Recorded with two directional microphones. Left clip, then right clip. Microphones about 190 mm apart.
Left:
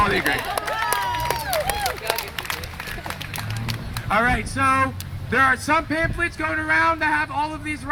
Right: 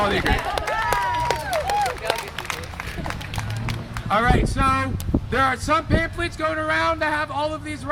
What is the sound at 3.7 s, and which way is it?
Speech, 40° right (ahead or behind).